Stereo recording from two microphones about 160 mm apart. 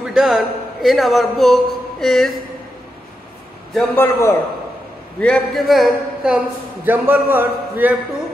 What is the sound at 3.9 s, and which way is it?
Speech, 15° left (ahead or behind).